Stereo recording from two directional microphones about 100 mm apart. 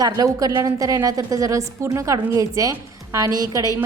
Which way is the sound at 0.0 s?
35° right (ahead or behind).